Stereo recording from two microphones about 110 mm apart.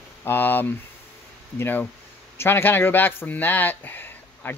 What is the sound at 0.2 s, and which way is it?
Speech, 20° left (ahead or behind).